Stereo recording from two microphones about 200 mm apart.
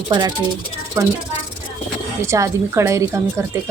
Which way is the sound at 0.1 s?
20° right (ahead or behind).